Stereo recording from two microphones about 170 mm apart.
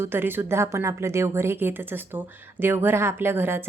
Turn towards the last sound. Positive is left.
turn(degrees=-15)  # may be behind; listen again after turning